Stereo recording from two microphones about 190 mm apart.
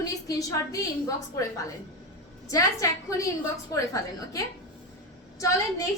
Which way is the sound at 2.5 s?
15° left (ahead or behind).